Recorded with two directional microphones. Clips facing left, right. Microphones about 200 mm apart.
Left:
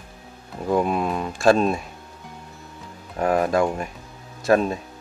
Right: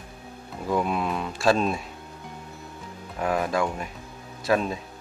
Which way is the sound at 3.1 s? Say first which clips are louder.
Left 5 dB; 45° left (ahead or behind).